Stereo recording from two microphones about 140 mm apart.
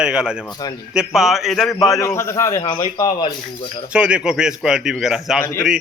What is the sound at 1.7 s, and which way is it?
Speech, 25° left (ahead or behind).